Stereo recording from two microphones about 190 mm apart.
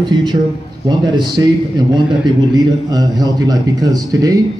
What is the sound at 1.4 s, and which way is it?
A man's voice, 20° right (ahead or behind).